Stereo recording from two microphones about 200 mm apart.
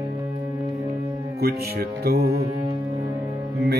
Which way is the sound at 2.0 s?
50° right (ahead or behind).